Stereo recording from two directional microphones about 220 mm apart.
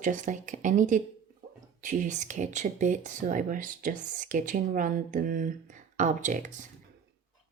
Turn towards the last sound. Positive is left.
turn(degrees=-35)  # may be behind; listen again after turning